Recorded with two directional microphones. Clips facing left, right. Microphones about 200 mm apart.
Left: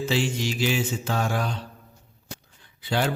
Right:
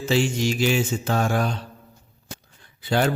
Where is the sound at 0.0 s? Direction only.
45° right (ahead or behind).